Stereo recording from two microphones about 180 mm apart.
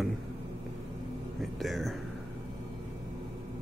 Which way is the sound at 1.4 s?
Centre (ahead or behind).